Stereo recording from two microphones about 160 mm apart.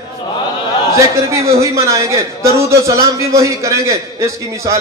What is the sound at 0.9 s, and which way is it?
A man's voice, 20° right (ahead or behind).